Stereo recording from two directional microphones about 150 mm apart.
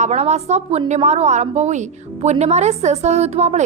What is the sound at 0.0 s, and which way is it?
A woman's voice, 45° right (ahead or behind).